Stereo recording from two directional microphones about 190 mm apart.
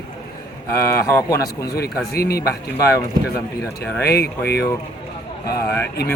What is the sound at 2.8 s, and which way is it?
Speech, 15° left (ahead or behind).